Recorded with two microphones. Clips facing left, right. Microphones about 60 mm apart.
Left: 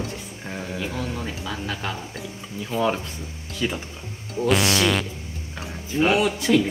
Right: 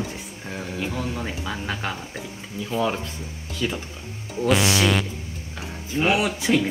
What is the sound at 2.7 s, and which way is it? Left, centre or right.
Snicker, centre.